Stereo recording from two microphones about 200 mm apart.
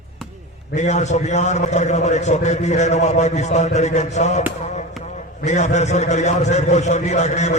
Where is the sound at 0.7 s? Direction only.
35° left (ahead or behind).